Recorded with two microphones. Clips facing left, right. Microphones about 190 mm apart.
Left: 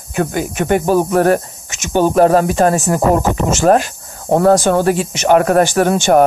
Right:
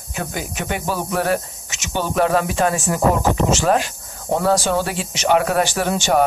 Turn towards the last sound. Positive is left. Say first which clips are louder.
# left 7 dB
turn(degrees=50)  # may be behind; listen again after turning